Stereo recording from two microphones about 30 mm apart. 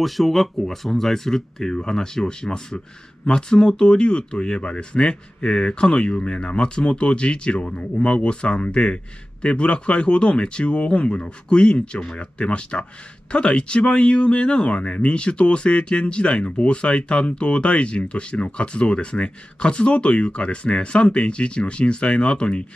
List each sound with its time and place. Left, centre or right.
0.0 s speech: centre; by 22.6 s left